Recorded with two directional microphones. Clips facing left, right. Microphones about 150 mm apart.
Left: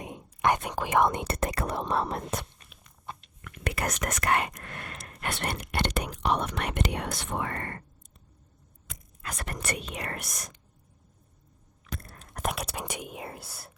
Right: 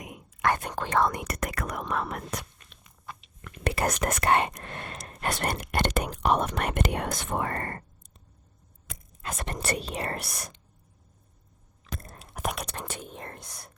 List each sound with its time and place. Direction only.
0.0 s whispering: 30° left (ahead or behind)
0.6 s speech: 10° left (ahead or behind); by 2.5 s 25° left (ahead or behind)
3.1 s biting: 25° left (ahead or behind)
3.4 s whispering: 30° right (ahead or behind)
4.0 s speech: 30° right (ahead or behind)
5.2 s speech: 40° right (ahead or behind)
9.2 s speech: 25° right (ahead or behind)
12.2 s whispering: 5° right (ahead or behind)